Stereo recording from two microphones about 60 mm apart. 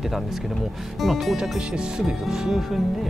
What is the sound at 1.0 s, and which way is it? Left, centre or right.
Speech, centre.